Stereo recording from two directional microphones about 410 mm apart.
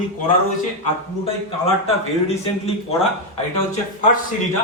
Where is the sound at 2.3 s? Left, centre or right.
Centre.